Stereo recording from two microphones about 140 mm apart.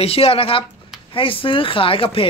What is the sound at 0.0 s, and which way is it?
Speech, 45° left (ahead or behind).